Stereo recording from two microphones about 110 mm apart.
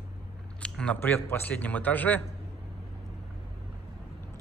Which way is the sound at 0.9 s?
20° left (ahead or behind).